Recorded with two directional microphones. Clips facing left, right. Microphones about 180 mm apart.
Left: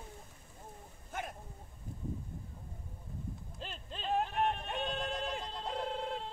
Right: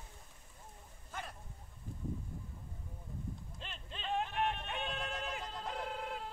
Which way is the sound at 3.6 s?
40° left (ahead or behind).